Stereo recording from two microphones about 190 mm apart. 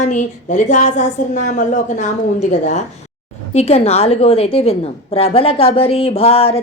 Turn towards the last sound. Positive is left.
turn(degrees=30)  # may be behind; listen again after turning